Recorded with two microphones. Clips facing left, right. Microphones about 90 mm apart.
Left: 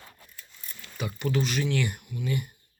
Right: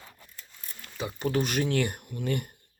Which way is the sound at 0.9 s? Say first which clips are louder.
Right 1 dB; 30° right (ahead or behind).